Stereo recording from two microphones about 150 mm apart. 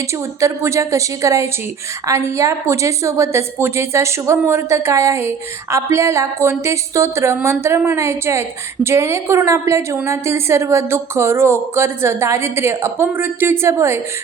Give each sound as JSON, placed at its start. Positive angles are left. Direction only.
{"t": 0.1, "sound": "a woman's voice", "side_deg": -20}